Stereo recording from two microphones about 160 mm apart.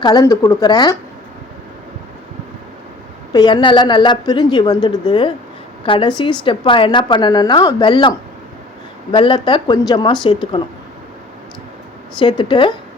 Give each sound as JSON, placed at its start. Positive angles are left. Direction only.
{"t": 0.0, "sound": "a woman's voice", "side_deg": 25}
{"t": 3.3, "sound": "a woman's voice", "side_deg": 30}
{"t": 9.1, "sound": "a woman's voice", "side_deg": 30}
{"t": 12.2, "sound": "a woman's voice", "side_deg": 30}